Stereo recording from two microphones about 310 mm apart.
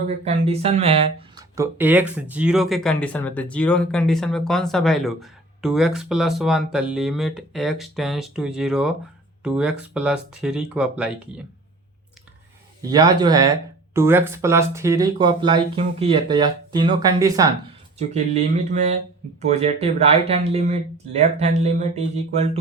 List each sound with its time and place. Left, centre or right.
0.1 s speech: right; by 11.1 s centre
12.8 s speech: centre
17.9 s speech: right